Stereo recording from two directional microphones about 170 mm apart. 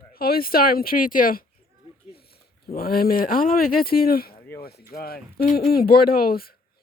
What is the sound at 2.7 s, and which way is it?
Speech, 60° left (ahead or behind).